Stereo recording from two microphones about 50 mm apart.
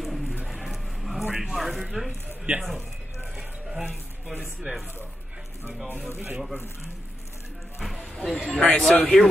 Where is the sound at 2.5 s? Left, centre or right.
Right.